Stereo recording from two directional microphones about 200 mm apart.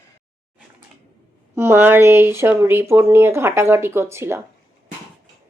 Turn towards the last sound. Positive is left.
turn(degrees=-15)  # may be behind; listen again after turning